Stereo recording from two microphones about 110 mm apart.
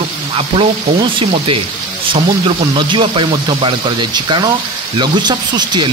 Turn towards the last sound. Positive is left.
turn(degrees=-40)  # may be behind; listen again after turning